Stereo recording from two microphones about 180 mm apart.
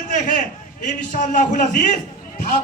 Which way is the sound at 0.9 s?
45° left (ahead or behind).